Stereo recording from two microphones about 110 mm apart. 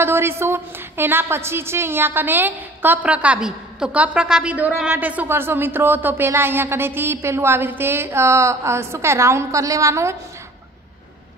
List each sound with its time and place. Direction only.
0.0 s a woman's voice: 20° right (ahead or behind)